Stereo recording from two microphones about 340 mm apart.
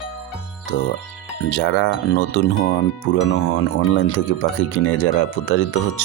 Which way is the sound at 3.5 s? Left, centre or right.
Left.